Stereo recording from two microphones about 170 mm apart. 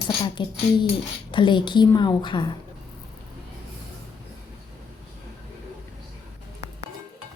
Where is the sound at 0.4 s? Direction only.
25° left (ahead or behind).